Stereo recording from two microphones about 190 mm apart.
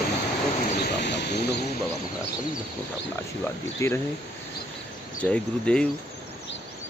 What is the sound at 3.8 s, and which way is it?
Speech, 15° left (ahead or behind).